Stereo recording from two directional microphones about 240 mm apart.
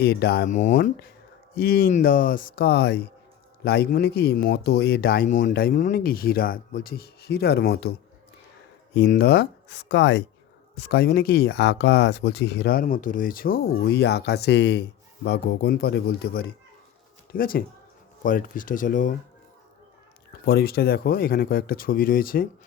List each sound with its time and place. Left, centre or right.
0.0 s speech: left
9.0 s speech: left
20.4 s speech: left